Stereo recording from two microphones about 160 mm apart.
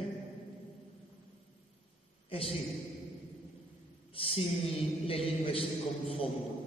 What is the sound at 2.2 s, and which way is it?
Speech, 35° left (ahead or behind).